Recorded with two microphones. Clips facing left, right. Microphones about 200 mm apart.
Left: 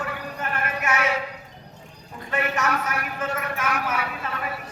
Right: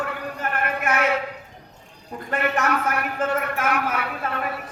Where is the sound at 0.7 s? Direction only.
55° right (ahead or behind).